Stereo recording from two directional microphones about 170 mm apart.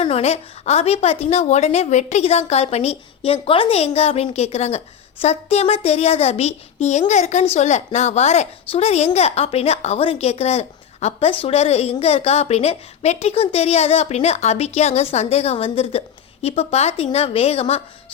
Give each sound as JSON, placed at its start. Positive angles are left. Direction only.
{"t": 0.0, "sound": "a woman's voice", "side_deg": 35}